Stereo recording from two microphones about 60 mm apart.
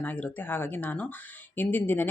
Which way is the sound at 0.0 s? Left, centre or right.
Left.